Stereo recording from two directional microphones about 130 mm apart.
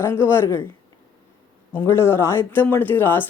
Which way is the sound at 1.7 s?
20° left (ahead or behind).